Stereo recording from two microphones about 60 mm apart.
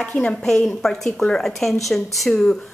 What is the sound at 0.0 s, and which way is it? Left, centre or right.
Speech, centre.